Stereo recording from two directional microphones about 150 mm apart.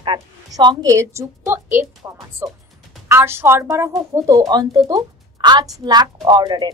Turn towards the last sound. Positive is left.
turn(degrees=-30)  # may be behind; listen again after turning